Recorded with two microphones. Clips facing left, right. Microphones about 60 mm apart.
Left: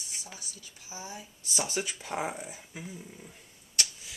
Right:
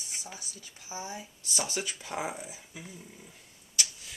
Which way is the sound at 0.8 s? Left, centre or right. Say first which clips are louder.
Right 3 dB; right.